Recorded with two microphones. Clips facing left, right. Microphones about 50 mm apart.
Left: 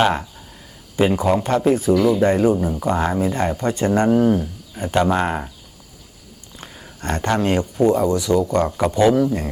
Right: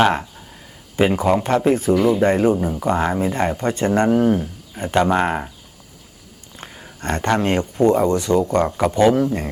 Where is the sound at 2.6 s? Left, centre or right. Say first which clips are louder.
Even; centre.